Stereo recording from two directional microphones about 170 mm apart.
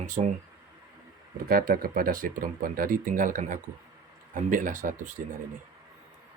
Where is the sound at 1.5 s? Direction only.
60° right (ahead or behind).